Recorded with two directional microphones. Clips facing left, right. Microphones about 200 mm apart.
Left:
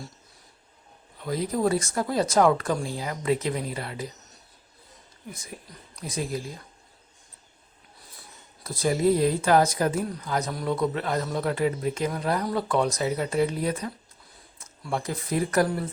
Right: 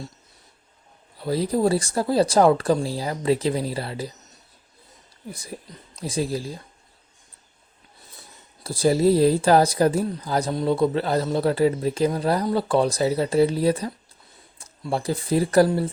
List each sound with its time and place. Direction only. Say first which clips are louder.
1.2 s speech: right 4 dB; 30° right (ahead or behind)
5.3 s speech: right 5 dB; 35° right (ahead or behind)
8.6 s speech: right 4 dB; 30° right (ahead or behind)